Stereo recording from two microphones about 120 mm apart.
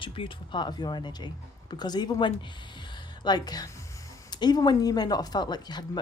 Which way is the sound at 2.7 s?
40° left (ahead or behind).